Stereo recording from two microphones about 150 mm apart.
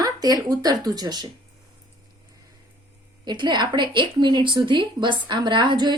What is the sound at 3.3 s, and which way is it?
A woman's voice, 30° right (ahead or behind).